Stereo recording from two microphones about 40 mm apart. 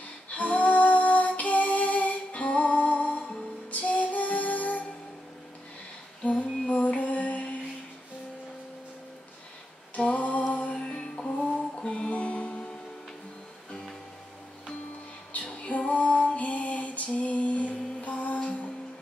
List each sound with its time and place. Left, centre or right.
0.3 s female singing: left
3.7 s music: left
6.2 s female singing: left
6.7 s music: left
9.9 s music: left
10.8 s music: left
15.3 s music: left